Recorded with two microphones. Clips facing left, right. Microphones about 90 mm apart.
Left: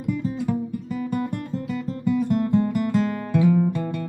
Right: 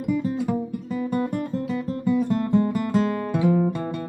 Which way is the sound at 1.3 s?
45° right (ahead or behind).